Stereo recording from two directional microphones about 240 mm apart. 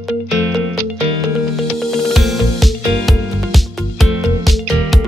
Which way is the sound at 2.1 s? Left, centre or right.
Centre.